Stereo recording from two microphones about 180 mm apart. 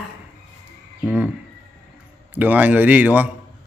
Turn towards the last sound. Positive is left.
turn(degrees=-10)  # may be behind; listen again after turning